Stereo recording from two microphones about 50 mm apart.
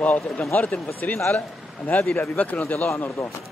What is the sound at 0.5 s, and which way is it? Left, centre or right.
Speech, left.